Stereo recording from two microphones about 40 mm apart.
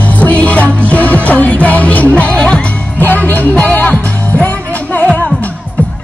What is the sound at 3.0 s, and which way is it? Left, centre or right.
Music, left.